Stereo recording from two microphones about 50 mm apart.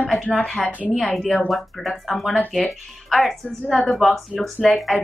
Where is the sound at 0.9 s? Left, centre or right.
Centre.